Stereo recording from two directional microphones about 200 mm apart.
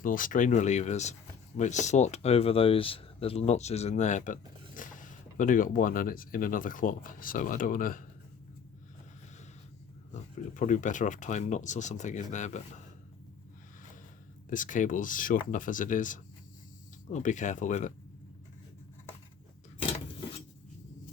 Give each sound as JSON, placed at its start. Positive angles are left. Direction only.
{"t": 0.0, "sound": "speech", "side_deg": 45}
{"t": 10.5, "sound": "speech", "side_deg": 40}
{"t": 14.5, "sound": "speech", "side_deg": 40}